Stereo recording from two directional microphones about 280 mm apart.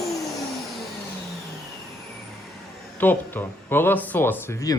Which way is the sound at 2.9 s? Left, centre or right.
Centre.